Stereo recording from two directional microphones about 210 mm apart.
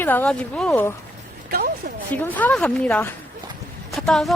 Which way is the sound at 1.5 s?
45° right (ahead or behind).